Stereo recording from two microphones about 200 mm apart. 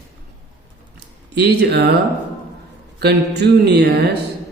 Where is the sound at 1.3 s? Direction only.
55° right (ahead or behind).